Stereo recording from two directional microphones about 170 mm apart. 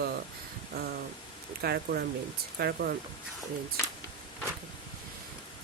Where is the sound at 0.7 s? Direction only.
65° right (ahead or behind).